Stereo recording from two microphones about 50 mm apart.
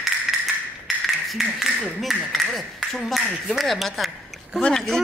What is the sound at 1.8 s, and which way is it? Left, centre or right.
Speech, centre.